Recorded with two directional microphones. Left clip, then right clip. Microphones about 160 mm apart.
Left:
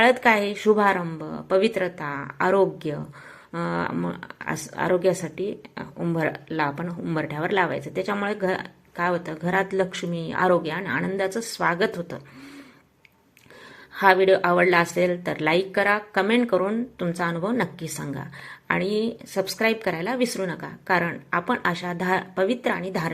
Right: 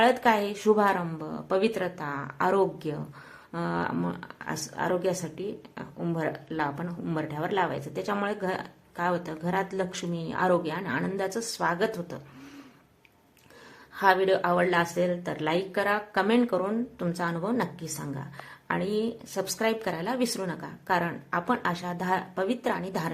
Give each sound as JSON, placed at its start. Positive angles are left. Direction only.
{"t": 0.0, "sound": "a woman's voice", "side_deg": 15}
{"t": 13.9, "sound": "a woman's voice", "side_deg": 15}